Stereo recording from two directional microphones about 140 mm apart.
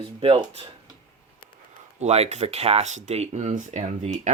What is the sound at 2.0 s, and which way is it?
Speech, 50° right (ahead or behind).